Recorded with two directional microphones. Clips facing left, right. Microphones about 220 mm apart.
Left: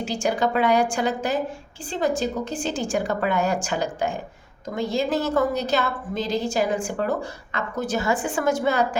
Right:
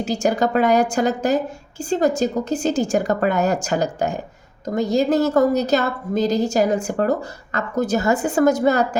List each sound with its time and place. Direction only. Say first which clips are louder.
0.0 s a woman's voice: right 4 dB; 40° right (ahead or behind)